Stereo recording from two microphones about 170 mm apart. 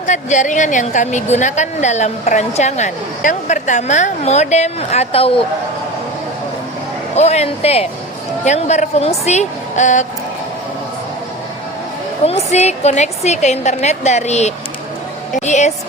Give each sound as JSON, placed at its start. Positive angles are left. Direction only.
{"t": 0.0, "sound": "a woman's voice", "side_deg": 45}
{"t": 7.2, "sound": "a woman's voice", "side_deg": 40}
{"t": 12.2, "sound": "a woman's voice", "side_deg": 40}